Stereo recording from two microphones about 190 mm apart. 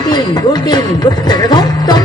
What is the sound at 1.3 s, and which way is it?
Music, 20° left (ahead or behind).